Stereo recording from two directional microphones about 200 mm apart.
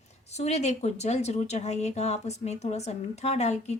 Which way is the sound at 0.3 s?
35° left (ahead or behind).